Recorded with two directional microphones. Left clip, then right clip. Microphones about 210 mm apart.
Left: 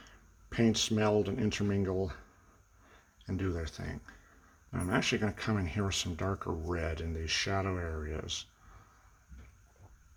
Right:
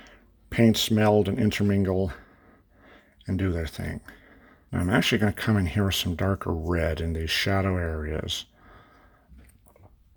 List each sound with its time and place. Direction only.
0.5 s speech: 35° right (ahead or behind)